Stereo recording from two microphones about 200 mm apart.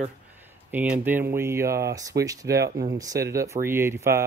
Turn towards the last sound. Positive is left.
turn(degrees=-10)  # may be behind; listen again after turning